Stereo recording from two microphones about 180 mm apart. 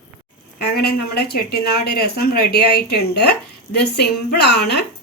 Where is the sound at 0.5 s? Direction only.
65° left (ahead or behind).